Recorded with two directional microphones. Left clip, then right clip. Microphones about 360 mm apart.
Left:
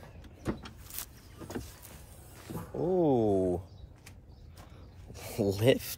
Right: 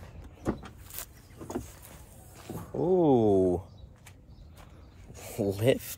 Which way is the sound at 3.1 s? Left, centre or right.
Right.